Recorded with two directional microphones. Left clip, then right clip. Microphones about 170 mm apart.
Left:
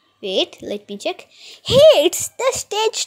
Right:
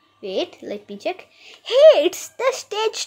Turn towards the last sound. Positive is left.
turn(degrees=20)  # may be behind; listen again after turning